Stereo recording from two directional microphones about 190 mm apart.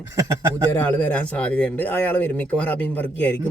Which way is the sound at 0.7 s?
10° left (ahead or behind).